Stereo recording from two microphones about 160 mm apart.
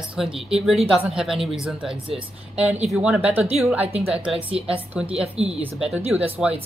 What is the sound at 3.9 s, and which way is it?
Speech, 35° right (ahead or behind).